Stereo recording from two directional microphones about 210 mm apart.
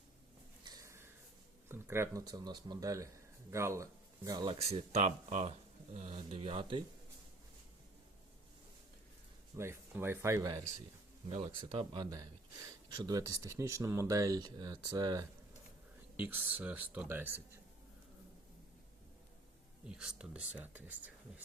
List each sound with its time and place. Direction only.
0.6 s a sound: 15° right (ahead or behind)
1.6 s speech: 10° right (ahead or behind)
9.6 s speech: 10° right (ahead or behind)
11.3 s speech: 25° right (ahead or behind)
16.1 s speech: 10° right (ahead or behind)
19.8 s speech: 5° right (ahead or behind)